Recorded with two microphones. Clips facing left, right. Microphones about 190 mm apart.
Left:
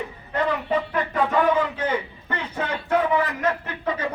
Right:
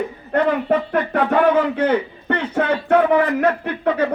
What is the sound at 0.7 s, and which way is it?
A man's voice, 65° right (ahead or behind).